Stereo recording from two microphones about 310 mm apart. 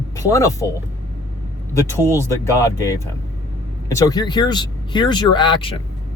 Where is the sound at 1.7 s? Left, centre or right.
Centre.